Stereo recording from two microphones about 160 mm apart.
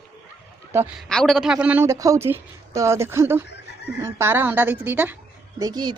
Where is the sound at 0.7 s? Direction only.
15° right (ahead or behind).